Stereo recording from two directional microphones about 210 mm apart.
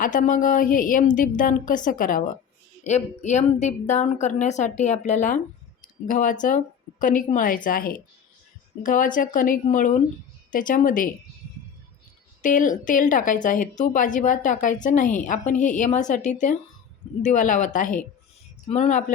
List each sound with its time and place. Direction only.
0.0 s speech: 40° left (ahead or behind)
12.4 s speech: 40° left (ahead or behind)